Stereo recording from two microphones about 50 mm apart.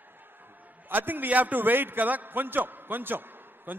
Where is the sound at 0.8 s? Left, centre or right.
Right.